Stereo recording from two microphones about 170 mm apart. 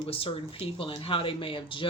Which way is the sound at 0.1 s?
35° left (ahead or behind).